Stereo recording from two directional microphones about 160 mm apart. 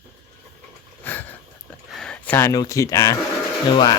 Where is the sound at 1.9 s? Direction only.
5° left (ahead or behind).